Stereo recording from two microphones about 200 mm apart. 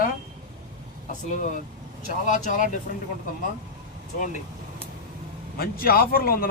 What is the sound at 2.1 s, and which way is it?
Speech, 40° left (ahead or behind).